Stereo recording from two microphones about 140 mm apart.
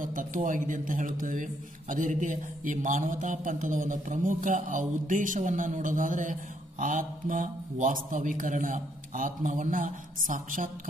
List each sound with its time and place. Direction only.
0.0 s a man's voice: 70° right (ahead or behind)